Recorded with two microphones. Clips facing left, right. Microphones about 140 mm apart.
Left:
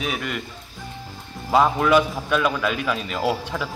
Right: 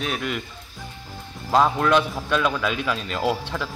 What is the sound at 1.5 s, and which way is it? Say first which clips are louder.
A man's voice: left 1 dB; 5° left (ahead or behind).